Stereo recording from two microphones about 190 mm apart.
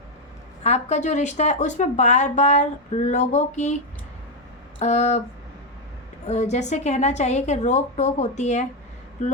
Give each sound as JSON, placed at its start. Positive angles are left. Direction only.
{"t": 0.6, "sound": "speech", "side_deg": 35}
{"t": 4.8, "sound": "speech", "side_deg": 35}
{"t": 6.2, "sound": "speech", "side_deg": 35}